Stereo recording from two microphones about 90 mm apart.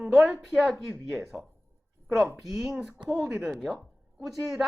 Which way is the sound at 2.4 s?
5° right (ahead or behind).